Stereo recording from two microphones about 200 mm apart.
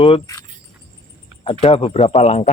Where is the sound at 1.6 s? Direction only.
30° left (ahead or behind).